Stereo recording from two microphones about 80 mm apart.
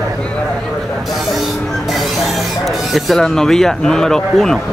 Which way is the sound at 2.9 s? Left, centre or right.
Centre.